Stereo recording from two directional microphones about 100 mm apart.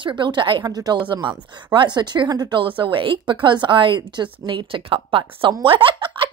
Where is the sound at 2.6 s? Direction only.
60° right (ahead or behind).